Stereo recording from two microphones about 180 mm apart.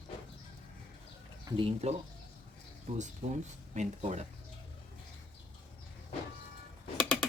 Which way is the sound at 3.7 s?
40° right (ahead or behind).